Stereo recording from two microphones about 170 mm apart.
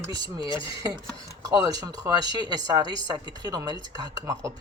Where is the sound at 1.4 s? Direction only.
20° right (ahead or behind).